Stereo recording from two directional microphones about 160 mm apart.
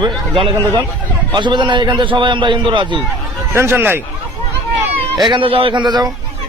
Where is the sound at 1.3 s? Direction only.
30° right (ahead or behind).